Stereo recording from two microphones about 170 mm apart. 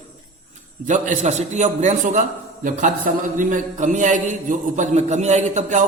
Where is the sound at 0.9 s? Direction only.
45° right (ahead or behind).